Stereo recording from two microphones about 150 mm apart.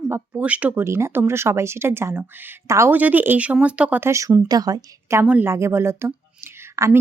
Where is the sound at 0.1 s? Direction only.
10° right (ahead or behind).